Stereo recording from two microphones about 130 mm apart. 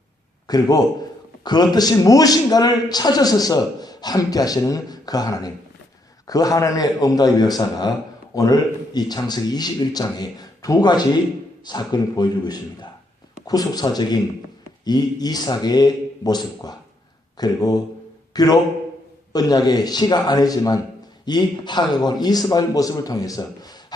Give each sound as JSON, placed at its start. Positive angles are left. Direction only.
{"t": 0.4, "sound": "a man's voice", "side_deg": 30}